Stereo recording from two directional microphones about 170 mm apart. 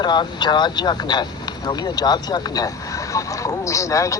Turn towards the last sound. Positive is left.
turn(degrees=20)  # may be behind; listen again after turning